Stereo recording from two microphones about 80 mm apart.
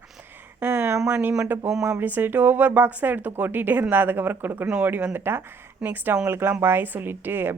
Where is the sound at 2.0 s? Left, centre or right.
Right.